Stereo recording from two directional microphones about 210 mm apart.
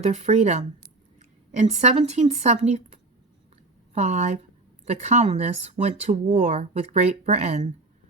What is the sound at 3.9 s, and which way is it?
Speech, 35° right (ahead or behind).